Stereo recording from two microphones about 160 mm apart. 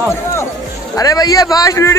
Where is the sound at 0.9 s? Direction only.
25° left (ahead or behind).